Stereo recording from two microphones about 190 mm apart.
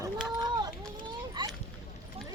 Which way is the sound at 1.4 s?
25° right (ahead or behind).